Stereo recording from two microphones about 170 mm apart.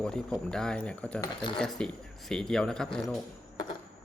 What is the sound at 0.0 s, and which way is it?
Speech, 5° left (ahead or behind).